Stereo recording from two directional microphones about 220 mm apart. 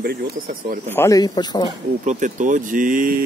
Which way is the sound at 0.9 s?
10° left (ahead or behind).